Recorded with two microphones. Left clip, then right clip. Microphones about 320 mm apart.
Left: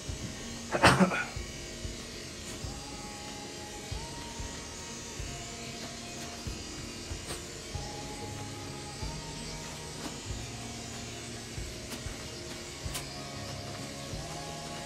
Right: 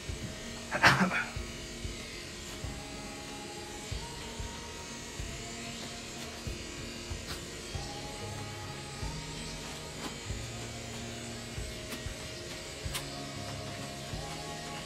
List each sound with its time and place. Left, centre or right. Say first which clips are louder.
0.7 s electric shaver: left 1 dB; centre